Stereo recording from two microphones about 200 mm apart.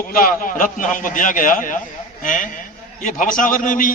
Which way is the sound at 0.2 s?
45° left (ahead or behind).